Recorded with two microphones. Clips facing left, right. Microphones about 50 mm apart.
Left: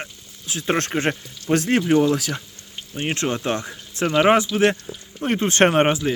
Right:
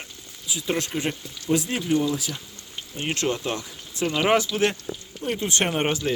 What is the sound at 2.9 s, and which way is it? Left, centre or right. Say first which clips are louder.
Speech: left 2 dB; left.